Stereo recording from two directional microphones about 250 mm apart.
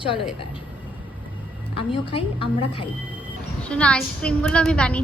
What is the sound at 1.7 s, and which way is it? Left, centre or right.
A woman's voice, left.